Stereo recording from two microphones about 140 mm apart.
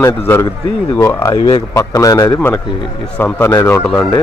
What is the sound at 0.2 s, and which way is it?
A man's voice, 15° left (ahead or behind).